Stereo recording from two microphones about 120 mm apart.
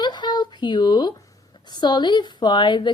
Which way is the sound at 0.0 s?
35° left (ahead or behind).